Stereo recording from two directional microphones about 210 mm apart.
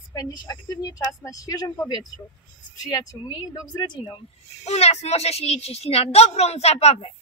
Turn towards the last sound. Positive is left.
turn(degrees=30)  # may be behind; listen again after turning